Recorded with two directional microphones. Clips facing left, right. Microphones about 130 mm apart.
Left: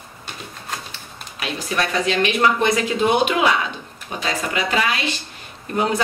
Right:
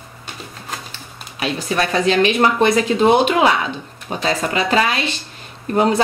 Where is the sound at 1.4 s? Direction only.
35° right (ahead or behind).